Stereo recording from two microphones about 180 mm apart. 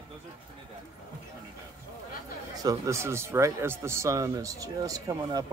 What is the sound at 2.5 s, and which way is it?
Speech, 20° right (ahead or behind).